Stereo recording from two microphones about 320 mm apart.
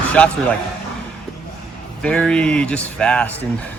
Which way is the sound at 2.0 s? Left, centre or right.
Centre.